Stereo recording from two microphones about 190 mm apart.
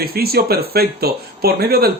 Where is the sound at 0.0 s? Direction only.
55° right (ahead or behind).